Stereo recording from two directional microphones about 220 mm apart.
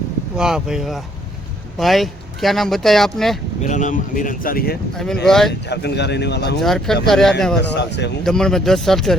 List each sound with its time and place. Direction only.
0.3 s speech: 5° right (ahead or behind)
3.6 s speech: 35° left (ahead or behind)
5.2 s speech: centre (ahead or behind)
5.5 s speech: 50° left (ahead or behind)
6.6 s speech: centre (ahead or behind)
7.6 s speech: 50° left (ahead or behind)
8.2 s speech: centre (ahead or behind)